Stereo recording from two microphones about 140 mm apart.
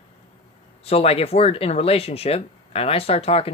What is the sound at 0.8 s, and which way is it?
Speech, 45° left (ahead or behind).